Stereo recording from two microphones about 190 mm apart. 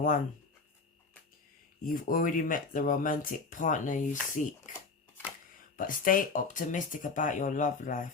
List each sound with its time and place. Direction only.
1.8 s speech: 45° left (ahead or behind)
5.7 s speech: 45° left (ahead or behind)